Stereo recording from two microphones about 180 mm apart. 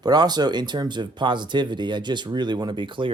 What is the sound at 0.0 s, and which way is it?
A man's voice, 25° right (ahead or behind).